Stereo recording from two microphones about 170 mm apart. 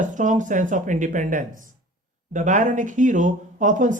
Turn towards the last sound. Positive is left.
turn(degrees=-50)  # may be behind; listen again after turning